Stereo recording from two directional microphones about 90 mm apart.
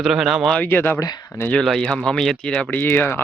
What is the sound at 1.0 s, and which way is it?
Speech, 45° left (ahead or behind).